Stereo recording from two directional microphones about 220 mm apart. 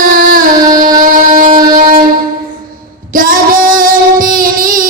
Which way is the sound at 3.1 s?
40° right (ahead or behind).